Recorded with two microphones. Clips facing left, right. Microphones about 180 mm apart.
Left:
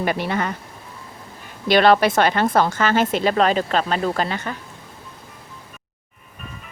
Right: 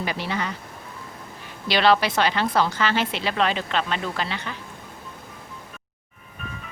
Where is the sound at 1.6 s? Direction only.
50° left (ahead or behind).